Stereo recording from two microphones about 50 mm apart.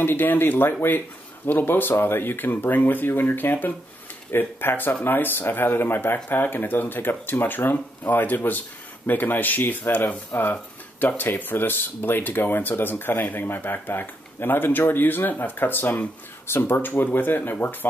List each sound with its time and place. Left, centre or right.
0.0 s speech: left